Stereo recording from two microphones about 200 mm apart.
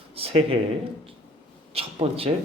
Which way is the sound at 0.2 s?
30° right (ahead or behind).